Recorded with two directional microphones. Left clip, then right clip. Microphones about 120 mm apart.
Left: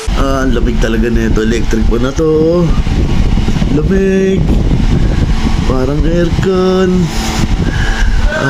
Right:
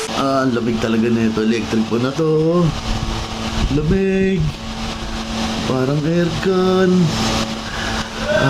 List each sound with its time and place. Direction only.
0.3 s speech: 15° left (ahead or behind)
4.0 s speech: 15° left (ahead or behind)
5.7 s speech: 15° left (ahead or behind)